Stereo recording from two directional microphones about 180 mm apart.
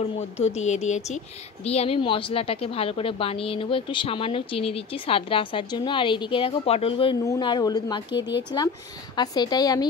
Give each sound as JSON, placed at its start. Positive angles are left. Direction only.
{"t": 0.0, "sound": "a woman's voice", "side_deg": 35}